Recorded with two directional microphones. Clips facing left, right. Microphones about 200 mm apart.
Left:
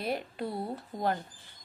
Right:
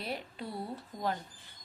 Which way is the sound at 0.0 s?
50° left (ahead or behind).